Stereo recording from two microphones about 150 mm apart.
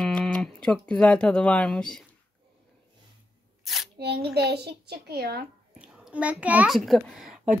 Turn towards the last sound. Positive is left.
turn(degrees=0)  # may be behind; listen again after turning